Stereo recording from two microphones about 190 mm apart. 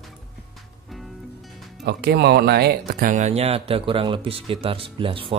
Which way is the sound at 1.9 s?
60° right (ahead or behind).